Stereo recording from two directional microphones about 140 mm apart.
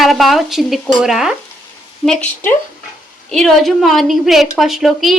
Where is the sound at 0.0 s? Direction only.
Centre (ahead or behind).